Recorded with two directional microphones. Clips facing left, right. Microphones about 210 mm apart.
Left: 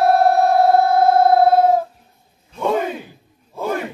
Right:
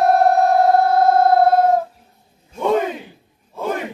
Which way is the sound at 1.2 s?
10° left (ahead or behind).